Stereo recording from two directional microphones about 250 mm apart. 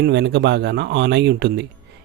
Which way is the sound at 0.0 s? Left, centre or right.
Right.